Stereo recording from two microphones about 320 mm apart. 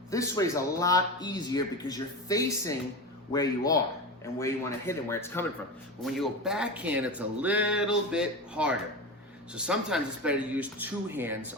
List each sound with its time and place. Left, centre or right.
0.1 s a man's voice: centre